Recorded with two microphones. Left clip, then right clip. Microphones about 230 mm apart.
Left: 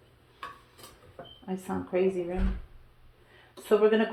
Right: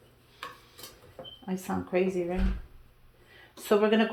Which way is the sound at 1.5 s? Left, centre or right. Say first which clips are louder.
Right 1 dB; right.